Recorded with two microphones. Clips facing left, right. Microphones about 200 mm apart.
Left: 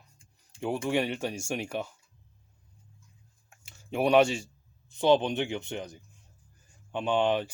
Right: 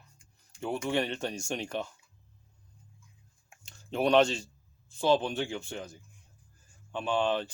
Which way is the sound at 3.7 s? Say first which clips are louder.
Left 1 dB; 10° left (ahead or behind).